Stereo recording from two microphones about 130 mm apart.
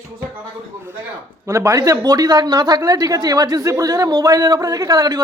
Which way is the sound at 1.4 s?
25° right (ahead or behind).